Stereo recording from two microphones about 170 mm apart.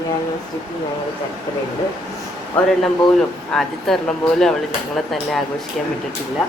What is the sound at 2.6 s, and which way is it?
Speech, 10° left (ahead or behind).